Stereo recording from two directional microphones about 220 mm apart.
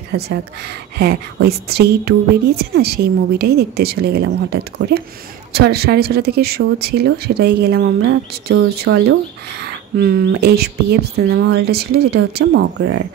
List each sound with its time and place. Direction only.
0.1 s a woman's voice: 50° right (ahead or behind)